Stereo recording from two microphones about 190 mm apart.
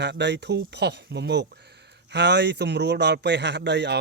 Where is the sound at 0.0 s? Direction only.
65° right (ahead or behind).